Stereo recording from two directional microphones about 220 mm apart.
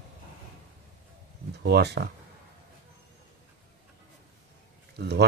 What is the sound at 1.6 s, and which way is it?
Speech, 50° right (ahead or behind).